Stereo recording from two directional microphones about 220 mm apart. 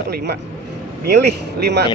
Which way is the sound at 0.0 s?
45° right (ahead or behind).